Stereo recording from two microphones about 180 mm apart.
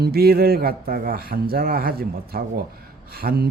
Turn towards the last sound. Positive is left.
turn(degrees=-60)  # may be behind; listen again after turning